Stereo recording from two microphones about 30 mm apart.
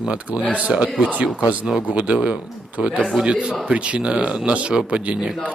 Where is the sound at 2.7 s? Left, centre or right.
Right.